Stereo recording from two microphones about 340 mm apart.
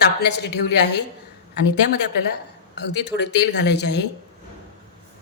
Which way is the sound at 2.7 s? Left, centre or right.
Left.